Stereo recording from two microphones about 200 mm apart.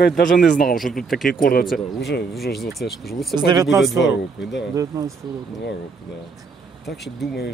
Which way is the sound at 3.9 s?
60° left (ahead or behind).